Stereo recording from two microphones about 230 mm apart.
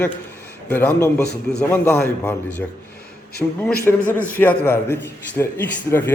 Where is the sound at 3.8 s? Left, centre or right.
Centre.